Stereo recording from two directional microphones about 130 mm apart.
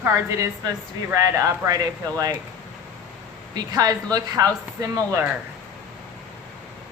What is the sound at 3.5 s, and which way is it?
Speech, 30° right (ahead or behind).